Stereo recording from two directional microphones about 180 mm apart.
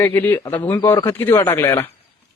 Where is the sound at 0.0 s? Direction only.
10° left (ahead or behind).